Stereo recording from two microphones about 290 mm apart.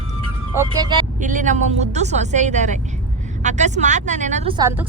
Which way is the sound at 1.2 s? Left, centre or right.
Right.